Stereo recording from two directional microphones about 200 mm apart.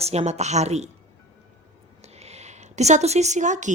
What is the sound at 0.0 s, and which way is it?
Speech, 35° right (ahead or behind).